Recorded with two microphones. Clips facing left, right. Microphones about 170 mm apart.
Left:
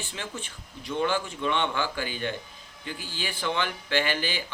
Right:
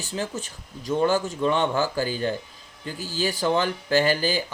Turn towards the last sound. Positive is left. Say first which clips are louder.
# right 6 dB
turn(degrees=-40)  # may be behind; listen again after turning